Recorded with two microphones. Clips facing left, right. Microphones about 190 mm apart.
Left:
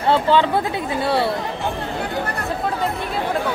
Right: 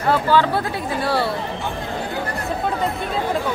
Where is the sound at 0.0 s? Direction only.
25° left (ahead or behind).